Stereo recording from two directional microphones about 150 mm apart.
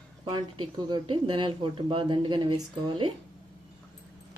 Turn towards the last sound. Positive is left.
turn(degrees=-30)  # may be behind; listen again after turning